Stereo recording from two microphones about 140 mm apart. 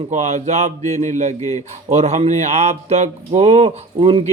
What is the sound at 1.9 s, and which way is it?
A man's voice, 50° right (ahead or behind).